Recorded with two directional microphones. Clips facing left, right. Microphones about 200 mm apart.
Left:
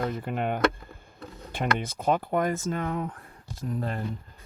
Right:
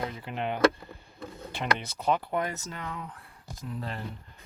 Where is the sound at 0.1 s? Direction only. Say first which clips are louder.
Left 4 dB; 50° left (ahead or behind).